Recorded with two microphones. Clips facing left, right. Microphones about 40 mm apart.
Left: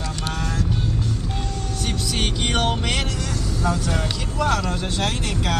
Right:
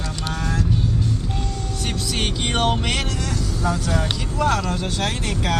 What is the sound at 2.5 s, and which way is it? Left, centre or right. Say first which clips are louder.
Music: right 2 dB; centre.